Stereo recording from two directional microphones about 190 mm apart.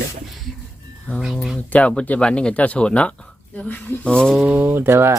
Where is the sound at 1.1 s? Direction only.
Centre (ahead or behind).